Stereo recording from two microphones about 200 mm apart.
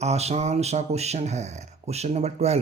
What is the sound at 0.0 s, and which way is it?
Speech, 35° right (ahead or behind).